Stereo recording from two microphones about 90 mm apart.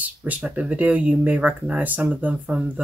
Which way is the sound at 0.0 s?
15° right (ahead or behind).